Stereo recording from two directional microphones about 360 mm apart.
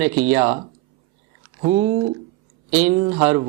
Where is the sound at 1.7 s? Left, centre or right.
Centre.